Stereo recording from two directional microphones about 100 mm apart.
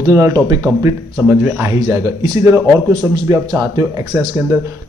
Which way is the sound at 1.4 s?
20° right (ahead or behind).